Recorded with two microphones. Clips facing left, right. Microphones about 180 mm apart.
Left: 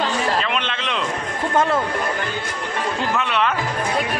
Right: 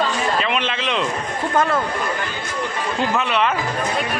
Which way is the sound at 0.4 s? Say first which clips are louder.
Right 2 dB; 5° right (ahead or behind).